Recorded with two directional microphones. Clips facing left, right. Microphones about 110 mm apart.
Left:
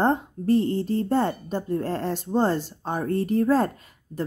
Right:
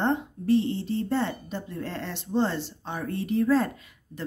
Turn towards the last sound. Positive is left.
turn(degrees=45)  # may be behind; listen again after turning